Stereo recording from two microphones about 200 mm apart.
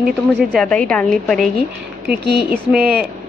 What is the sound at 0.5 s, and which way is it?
Speech, 5° left (ahead or behind).